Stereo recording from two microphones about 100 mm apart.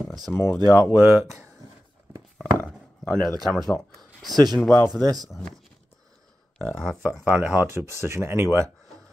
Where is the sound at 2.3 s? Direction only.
15° left (ahead or behind).